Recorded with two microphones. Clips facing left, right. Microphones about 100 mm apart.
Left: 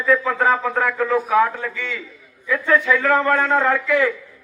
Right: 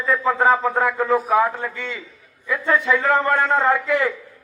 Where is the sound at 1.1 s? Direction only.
5° right (ahead or behind).